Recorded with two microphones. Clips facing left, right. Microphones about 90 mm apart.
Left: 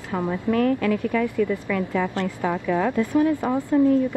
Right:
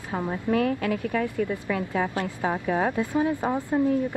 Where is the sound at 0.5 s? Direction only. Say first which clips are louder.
Left 3 dB; 45° left (ahead or behind).